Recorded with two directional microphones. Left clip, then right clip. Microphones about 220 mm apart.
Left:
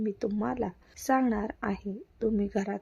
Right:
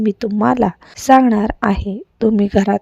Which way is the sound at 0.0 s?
40° right (ahead or behind).